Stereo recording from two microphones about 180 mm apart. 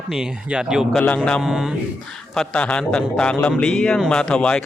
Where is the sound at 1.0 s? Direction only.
5° left (ahead or behind).